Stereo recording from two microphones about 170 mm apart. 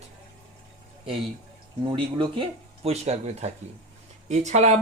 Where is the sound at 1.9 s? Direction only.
30° right (ahead or behind).